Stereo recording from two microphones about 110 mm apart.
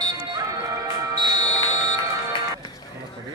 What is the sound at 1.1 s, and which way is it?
Music, 40° right (ahead or behind).